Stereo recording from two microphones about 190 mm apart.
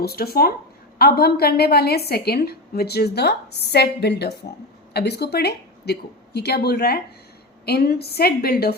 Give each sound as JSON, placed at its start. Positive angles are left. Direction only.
{"t": 0.0, "sound": "a woman's voice", "side_deg": 55}